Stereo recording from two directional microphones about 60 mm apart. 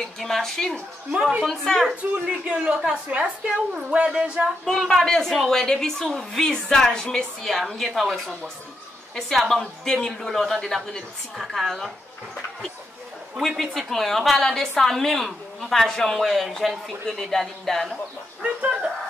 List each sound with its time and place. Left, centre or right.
0.2 s a woman's voice: centre
2.2 s a woman's voice: centre
4.6 s a woman's voice: centre
13.4 s a woman's voice: centre
18.4 s a woman's voice: centre